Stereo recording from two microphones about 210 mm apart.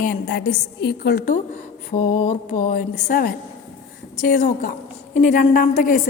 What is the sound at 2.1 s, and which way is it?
A woman's voice, 35° left (ahead or behind).